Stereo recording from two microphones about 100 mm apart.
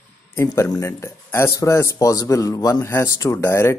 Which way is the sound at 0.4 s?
30° left (ahead or behind).